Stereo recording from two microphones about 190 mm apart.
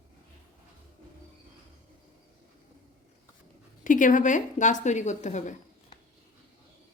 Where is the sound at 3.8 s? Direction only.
45° left (ahead or behind).